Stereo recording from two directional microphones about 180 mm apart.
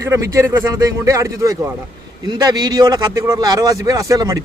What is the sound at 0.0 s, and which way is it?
Speech, 15° right (ahead or behind).